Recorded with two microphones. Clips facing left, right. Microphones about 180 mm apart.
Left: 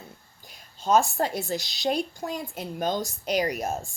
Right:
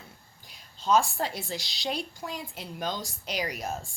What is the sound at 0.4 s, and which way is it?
A woman's voice, 50° left (ahead or behind).